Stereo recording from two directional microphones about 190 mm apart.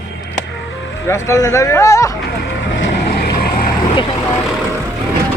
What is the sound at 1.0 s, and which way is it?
Speech, 15° left (ahead or behind).